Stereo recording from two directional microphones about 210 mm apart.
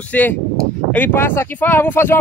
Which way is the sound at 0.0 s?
5° left (ahead or behind).